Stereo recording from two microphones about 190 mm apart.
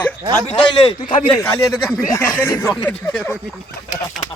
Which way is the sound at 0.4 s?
35° left (ahead or behind).